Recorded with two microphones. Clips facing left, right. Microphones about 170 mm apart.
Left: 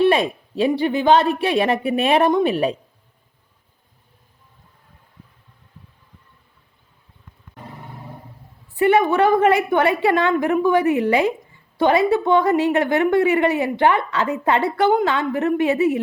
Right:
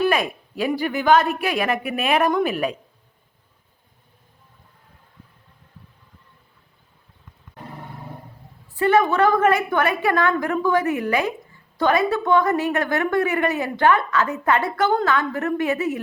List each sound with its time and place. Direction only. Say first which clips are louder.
0.0 s a woman's voice: left 4 dB; 30° left (ahead or behind)
8.7 s a woman's voice: left 2 dB; 20° left (ahead or behind)